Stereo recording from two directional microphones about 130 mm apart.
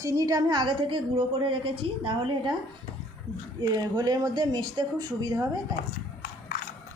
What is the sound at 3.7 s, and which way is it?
A woman's voice, 30° right (ahead or behind).